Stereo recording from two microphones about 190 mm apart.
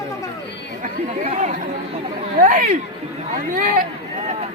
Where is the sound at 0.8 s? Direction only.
35° right (ahead or behind).